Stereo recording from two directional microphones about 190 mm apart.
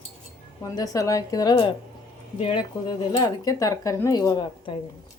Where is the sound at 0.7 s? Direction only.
20° left (ahead or behind).